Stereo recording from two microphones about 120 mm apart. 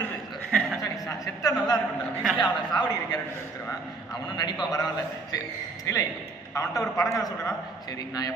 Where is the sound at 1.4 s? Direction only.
30° left (ahead or behind).